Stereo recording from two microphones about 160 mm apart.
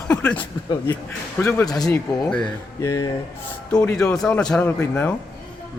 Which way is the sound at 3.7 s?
5° left (ahead or behind).